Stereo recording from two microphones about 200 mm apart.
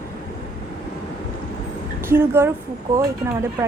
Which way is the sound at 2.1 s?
10° right (ahead or behind).